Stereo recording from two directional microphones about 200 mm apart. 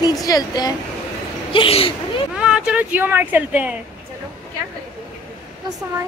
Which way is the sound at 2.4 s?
5° right (ahead or behind).